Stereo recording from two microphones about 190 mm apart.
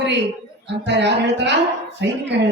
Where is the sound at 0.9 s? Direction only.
65° right (ahead or behind).